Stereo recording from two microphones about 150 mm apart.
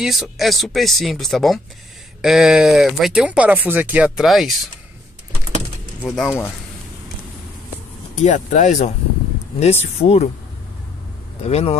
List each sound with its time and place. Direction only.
0.0 s speech: centre (ahead or behind)
6.0 s speech: centre (ahead or behind)
8.2 s speech: 55° left (ahead or behind)
11.4 s speech: 45° left (ahead or behind)